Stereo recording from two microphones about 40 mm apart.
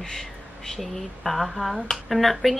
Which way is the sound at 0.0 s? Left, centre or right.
Centre.